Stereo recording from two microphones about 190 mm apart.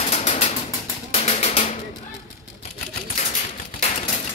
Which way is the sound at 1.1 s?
35° left (ahead or behind).